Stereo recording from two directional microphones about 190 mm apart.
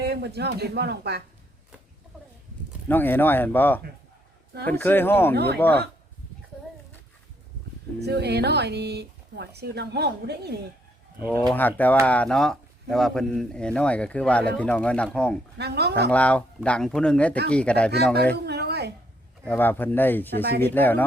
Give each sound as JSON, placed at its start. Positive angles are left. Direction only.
{"t": 0.0, "sound": "speech", "side_deg": -60}
{"t": 2.9, "sound": "speech", "side_deg": 10}
{"t": 7.9, "sound": "speech", "side_deg": -60}
{"t": 11.4, "sound": "speech", "side_deg": 10}
{"t": 15.5, "sound": "speech", "side_deg": -60}
{"t": 16.0, "sound": "speech", "side_deg": 5}
{"t": 18.4, "sound": "a sound", "side_deg": -60}
{"t": 19.5, "sound": "speech", "side_deg": 10}